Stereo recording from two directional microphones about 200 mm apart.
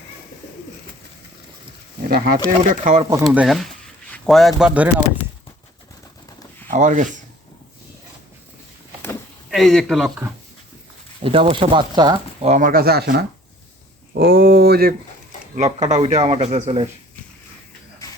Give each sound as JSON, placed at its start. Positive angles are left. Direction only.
{"t": 2.0, "sound": "speech", "side_deg": -50}
{"t": 2.6, "sound": "a man's voice", "side_deg": -40}
{"t": 3.2, "sound": "a sound", "side_deg": 0}
{"t": 4.6, "sound": "speech", "side_deg": -5}
{"t": 6.7, "sound": "speech", "side_deg": -40}
{"t": 9.5, "sound": "speech", "side_deg": 0}
{"t": 11.2, "sound": "speech", "side_deg": -25}
{"t": 12.4, "sound": "speech", "side_deg": -35}
{"t": 15.5, "sound": "a man's voice", "side_deg": -35}